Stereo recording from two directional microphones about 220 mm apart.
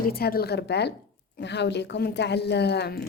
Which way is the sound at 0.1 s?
45° left (ahead or behind).